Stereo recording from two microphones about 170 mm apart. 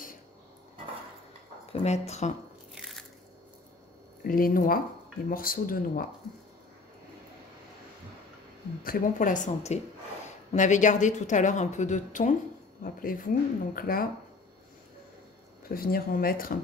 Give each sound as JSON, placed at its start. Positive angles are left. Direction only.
{"t": 1.7, "sound": "speech", "side_deg": 40}
{"t": 2.7, "sound": "biting", "side_deg": 0}
{"t": 4.2, "sound": "speech", "side_deg": 55}
{"t": 8.8, "sound": "a woman's voice", "side_deg": 55}
{"t": 15.7, "sound": "speech", "side_deg": 60}